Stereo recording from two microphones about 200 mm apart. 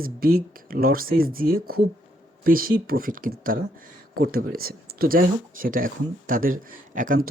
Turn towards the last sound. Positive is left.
turn(degrees=-40)  # may be behind; listen again after turning